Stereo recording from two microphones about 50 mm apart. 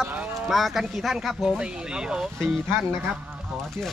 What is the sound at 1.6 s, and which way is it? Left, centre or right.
Speech, centre.